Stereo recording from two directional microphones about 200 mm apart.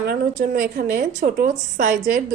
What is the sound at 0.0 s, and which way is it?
A woman's voice, 50° right (ahead or behind).